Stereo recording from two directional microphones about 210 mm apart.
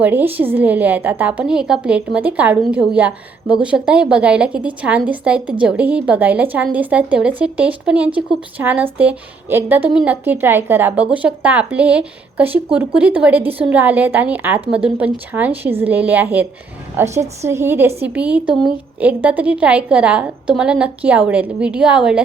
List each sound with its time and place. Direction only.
0.0 s speech: 10° right (ahead or behind)